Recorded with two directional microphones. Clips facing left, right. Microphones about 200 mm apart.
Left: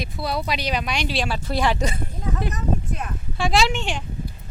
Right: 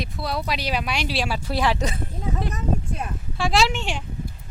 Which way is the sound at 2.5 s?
30° right (ahead or behind).